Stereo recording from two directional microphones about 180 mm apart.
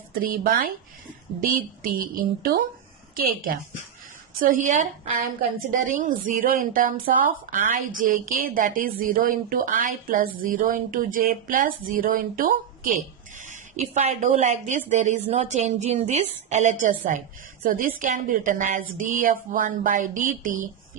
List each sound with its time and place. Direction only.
0.1 s speech: 50° right (ahead or behind)